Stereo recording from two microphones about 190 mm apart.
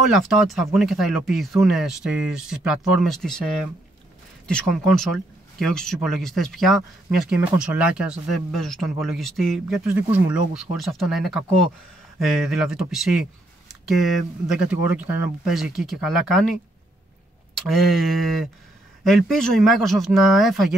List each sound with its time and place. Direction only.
0.1 s speech: centre (ahead or behind)
4.5 s speech: 5° left (ahead or behind)
17.6 s speech: centre (ahead or behind)